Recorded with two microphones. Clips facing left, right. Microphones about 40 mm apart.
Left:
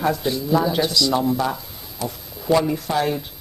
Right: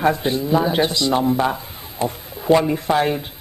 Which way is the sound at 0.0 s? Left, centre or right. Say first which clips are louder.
Right 3 dB; right.